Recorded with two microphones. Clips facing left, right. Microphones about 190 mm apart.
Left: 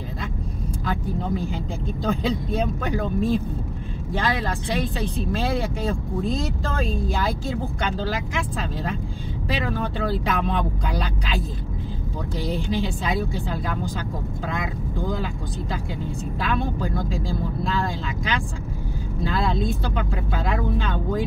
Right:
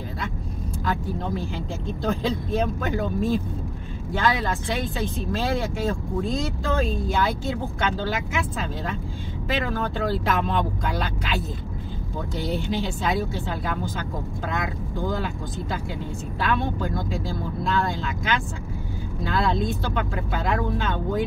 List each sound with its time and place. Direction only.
0.8 s speech: centre (ahead or behind)
12.4 s speech: centre (ahead or behind)
16.4 s speech: centre (ahead or behind)